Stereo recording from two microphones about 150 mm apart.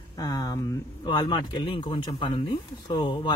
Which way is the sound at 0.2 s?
25° left (ahead or behind).